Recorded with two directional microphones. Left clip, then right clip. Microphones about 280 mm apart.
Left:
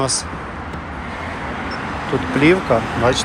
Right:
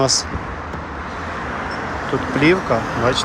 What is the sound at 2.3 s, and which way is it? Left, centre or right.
Speech, centre.